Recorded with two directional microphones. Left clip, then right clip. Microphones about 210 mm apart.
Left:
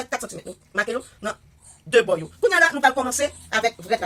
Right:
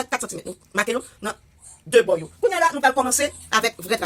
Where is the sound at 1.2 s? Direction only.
15° right (ahead or behind).